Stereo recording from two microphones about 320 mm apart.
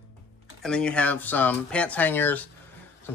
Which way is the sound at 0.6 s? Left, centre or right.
Centre.